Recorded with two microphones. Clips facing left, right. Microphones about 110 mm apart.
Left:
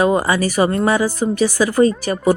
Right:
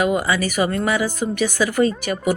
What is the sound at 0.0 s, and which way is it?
A woman's voice, 35° left (ahead or behind).